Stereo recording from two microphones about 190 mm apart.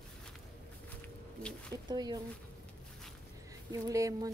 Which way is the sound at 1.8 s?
20° right (ahead or behind).